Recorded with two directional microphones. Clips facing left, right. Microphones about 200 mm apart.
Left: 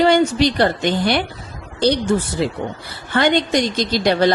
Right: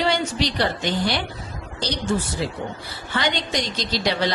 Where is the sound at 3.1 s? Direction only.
55° left (ahead or behind).